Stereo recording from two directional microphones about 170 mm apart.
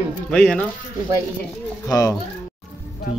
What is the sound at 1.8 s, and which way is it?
Speech, 20° left (ahead or behind).